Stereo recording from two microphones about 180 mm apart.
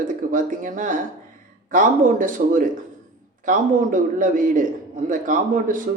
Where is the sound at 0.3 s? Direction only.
50° right (ahead or behind).